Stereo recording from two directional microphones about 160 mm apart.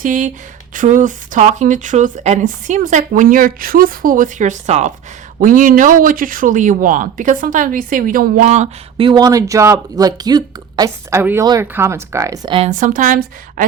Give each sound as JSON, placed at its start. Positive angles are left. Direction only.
{"t": 0.0, "sound": "speech", "side_deg": -55}
{"t": 5.4, "sound": "speech", "side_deg": -55}
{"t": 12.5, "sound": "speech", "side_deg": -50}